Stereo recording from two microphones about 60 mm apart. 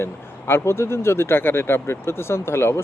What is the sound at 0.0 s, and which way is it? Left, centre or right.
Speech, left.